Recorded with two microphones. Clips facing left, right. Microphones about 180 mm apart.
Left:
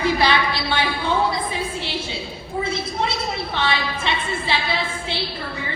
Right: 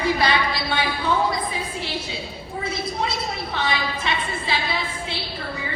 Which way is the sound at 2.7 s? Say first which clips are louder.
Right 1 dB; 25° left (ahead or behind).